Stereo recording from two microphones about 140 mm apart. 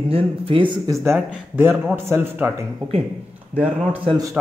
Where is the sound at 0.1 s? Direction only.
40° right (ahead or behind).